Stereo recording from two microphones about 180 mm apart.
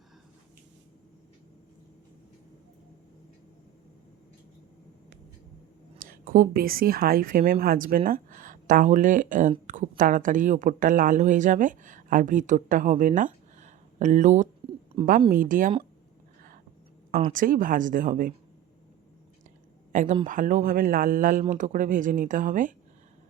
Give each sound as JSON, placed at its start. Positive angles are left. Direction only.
{"t": 6.0, "sound": "a woman's voice", "side_deg": -50}
{"t": 14.6, "sound": "a sound", "side_deg": -30}
{"t": 15.3, "sound": "speech", "side_deg": -50}
{"t": 17.3, "sound": "speech", "side_deg": -50}
{"t": 19.9, "sound": "speech", "side_deg": -45}